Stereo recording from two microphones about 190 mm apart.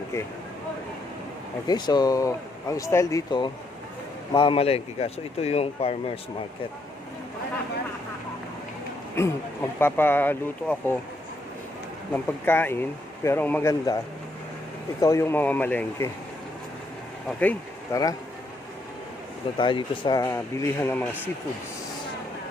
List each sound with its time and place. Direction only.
1.6 s speech: 20° left (ahead or behind)
9.2 s speech: 15° left (ahead or behind)
12.1 s speech: 10° left (ahead or behind)
15.0 s speech: 15° left (ahead or behind)
17.4 s speech: 10° left (ahead or behind)
19.5 s speech: 25° left (ahead or behind)